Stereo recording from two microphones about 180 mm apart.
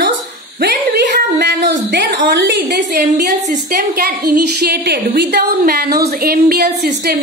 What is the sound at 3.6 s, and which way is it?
A woman's voice, 55° right (ahead or behind).